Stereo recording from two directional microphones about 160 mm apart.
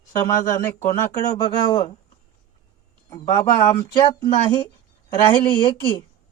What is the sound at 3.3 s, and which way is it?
Speech, 25° left (ahead or behind).